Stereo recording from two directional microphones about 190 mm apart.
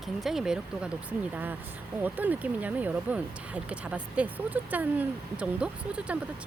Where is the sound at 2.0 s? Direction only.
10° right (ahead or behind).